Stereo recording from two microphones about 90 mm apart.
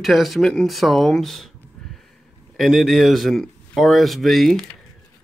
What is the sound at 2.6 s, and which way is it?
Speech, centre (ahead or behind).